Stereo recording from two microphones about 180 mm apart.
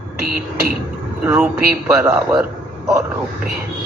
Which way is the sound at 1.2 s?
10° right (ahead or behind).